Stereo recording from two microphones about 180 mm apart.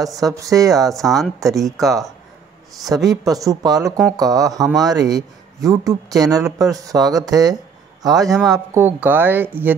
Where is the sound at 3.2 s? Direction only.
20° right (ahead or behind).